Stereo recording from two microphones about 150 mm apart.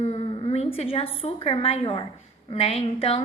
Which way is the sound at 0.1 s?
40° left (ahead or behind).